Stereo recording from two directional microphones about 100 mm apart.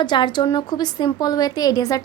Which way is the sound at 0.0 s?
50° left (ahead or behind).